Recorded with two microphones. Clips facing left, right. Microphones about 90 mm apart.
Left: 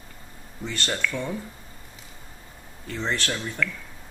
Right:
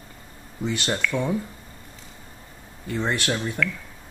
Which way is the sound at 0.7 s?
15° right (ahead or behind).